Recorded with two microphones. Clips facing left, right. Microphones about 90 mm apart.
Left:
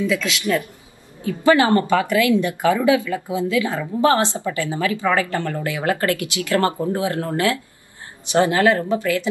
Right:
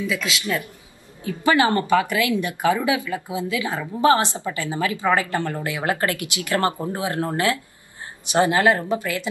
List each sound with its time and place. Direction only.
0.0 s speech: 15° right (ahead or behind)